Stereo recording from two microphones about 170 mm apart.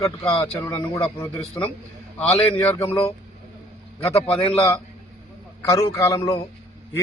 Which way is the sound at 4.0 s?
35° left (ahead or behind).